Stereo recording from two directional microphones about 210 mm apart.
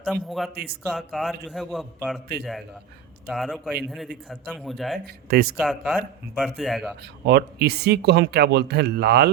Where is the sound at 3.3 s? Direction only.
Centre (ahead or behind).